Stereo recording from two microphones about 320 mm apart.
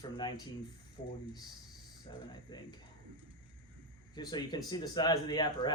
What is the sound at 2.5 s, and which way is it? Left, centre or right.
Speech, centre.